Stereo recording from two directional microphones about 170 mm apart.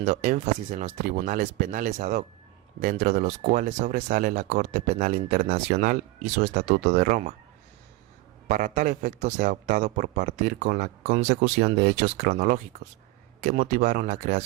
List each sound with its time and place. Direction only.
0.0 s speech: 50° right (ahead or behind)
8.4 s speech: 50° right (ahead or behind)